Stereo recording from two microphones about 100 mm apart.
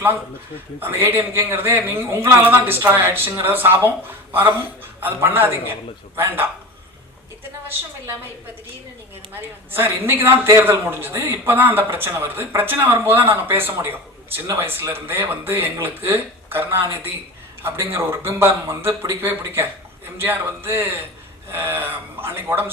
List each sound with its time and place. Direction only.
0.8 s a man's voice: 25° right (ahead or behind)
9.3 s a man's voice: 20° right (ahead or behind)